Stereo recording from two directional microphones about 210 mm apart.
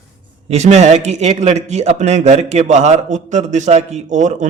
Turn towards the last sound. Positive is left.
turn(degrees=-35)  # may be behind; listen again after turning